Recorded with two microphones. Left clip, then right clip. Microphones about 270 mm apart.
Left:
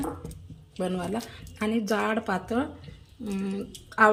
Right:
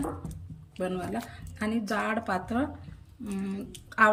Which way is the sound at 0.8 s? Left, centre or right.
Centre.